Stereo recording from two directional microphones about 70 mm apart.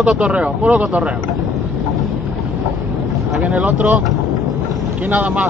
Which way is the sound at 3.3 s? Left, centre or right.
Centre.